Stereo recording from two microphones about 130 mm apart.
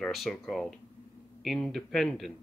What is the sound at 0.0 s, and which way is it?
Speech, centre (ahead or behind).